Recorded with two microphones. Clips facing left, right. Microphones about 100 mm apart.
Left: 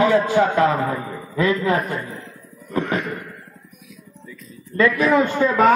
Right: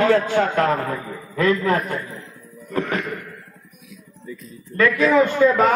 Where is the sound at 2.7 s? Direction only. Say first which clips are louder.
Left 1 dB; 10° left (ahead or behind).